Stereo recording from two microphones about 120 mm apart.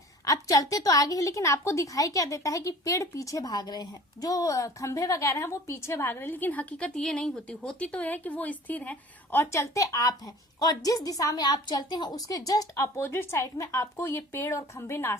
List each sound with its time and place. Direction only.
0.3 s a woman's voice: 30° left (ahead or behind)